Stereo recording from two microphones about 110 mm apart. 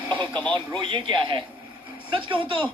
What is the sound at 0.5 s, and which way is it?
A man's voice, 45° right (ahead or behind).